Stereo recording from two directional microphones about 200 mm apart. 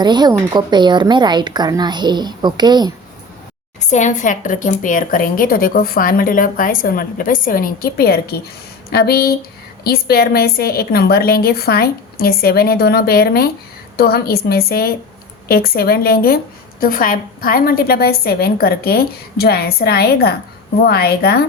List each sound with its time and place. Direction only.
0.0 s a woman's voice: 20° right (ahead or behind)
3.8 s speech: 35° left (ahead or behind)